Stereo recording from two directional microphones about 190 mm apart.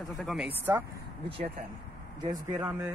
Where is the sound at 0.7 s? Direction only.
15° right (ahead or behind).